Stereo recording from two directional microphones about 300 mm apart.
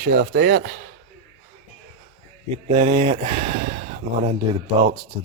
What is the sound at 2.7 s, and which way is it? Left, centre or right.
Speech, centre.